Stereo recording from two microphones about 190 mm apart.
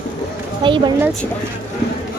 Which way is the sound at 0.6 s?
25° right (ahead or behind).